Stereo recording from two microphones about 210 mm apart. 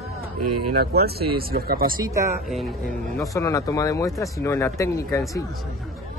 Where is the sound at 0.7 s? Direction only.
45° right (ahead or behind).